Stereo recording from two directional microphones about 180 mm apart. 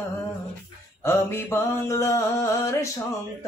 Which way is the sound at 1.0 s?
15° left (ahead or behind).